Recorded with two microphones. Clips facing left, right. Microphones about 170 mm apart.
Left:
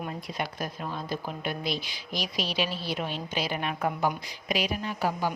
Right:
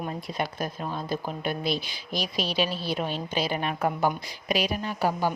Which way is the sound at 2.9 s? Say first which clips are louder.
Right 4 dB; 40° right (ahead or behind).